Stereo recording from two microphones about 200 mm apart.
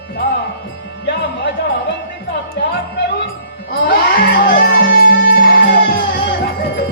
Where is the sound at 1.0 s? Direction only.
60° left (ahead or behind).